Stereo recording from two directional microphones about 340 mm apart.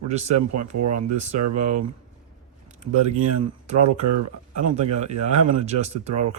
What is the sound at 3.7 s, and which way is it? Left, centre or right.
Speech, right.